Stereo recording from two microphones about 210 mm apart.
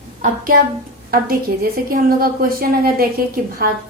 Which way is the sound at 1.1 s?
45° right (ahead or behind).